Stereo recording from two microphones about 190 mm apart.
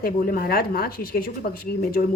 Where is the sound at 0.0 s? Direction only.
50° left (ahead or behind).